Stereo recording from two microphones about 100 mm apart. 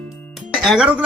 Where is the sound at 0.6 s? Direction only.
10° right (ahead or behind).